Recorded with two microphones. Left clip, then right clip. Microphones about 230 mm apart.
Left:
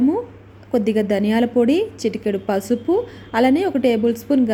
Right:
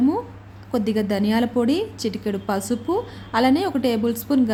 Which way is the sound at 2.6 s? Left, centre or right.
Right.